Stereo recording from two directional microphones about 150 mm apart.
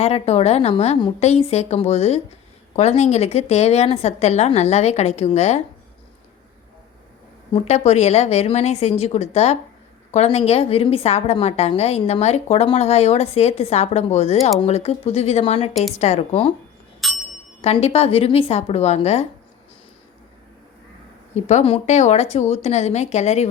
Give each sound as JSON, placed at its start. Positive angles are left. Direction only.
{"t": 0.0, "sound": "a woman's voice", "side_deg": 45}
{"t": 7.5, "sound": "a woman's voice", "side_deg": 45}
{"t": 17.0, "sound": "music", "side_deg": 0}
{"t": 17.6, "sound": "a woman's voice", "side_deg": 45}
{"t": 21.3, "sound": "a woman's voice", "side_deg": 50}